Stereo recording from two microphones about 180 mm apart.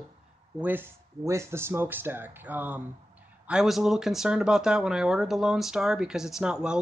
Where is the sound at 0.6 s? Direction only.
10° right (ahead or behind).